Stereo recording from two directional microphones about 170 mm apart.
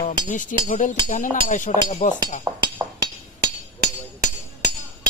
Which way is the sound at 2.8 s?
20° right (ahead or behind).